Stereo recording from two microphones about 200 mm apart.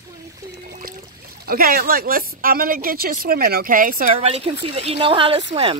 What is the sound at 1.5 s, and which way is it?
Speech, 50° right (ahead or behind).